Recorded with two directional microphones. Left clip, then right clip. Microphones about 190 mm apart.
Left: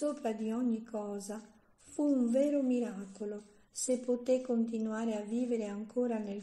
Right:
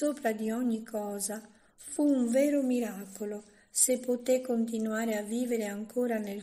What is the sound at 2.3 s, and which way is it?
A woman's voice, 5° right (ahead or behind).